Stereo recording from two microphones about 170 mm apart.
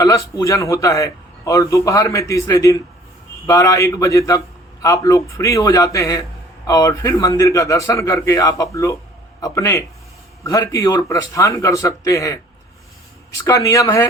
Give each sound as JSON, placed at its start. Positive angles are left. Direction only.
{"t": 0.0, "sound": "a man's voice", "side_deg": 20}
{"t": 13.4, "sound": "a man's voice", "side_deg": 20}